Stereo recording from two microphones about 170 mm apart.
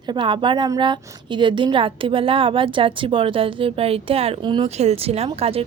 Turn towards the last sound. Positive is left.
turn(degrees=-35)  # may be behind; listen again after turning